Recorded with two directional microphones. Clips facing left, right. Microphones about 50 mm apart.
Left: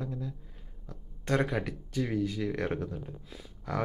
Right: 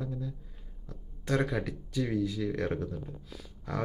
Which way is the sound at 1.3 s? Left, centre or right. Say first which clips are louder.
Left 1 dB; centre.